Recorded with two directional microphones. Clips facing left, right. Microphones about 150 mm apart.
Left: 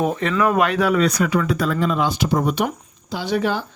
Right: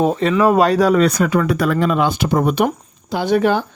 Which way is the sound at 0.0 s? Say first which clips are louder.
Right 5 dB; 30° right (ahead or behind).